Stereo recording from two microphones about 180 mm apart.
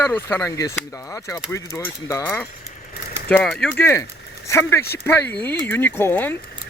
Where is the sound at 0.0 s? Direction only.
10° left (ahead or behind).